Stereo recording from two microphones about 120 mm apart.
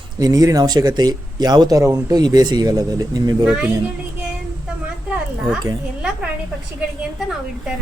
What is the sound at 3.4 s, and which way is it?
Speech, 10° right (ahead or behind).